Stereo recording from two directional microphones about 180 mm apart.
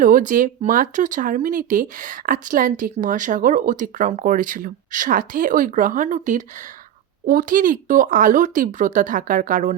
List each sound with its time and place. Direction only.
0.0 s speech: 50° right (ahead or behind)